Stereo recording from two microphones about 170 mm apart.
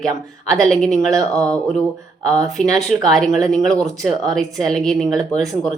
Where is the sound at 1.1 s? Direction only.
20° right (ahead or behind).